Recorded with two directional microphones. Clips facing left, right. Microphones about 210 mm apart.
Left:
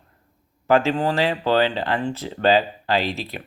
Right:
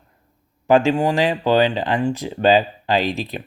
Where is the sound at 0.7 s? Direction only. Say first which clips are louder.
Right 3 dB; 15° right (ahead or behind).